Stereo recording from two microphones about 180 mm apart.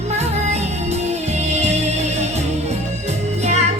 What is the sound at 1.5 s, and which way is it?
Music, 35° right (ahead or behind).